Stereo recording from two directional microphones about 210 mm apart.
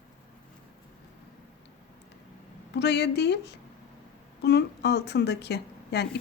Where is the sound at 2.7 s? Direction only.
55° left (ahead or behind).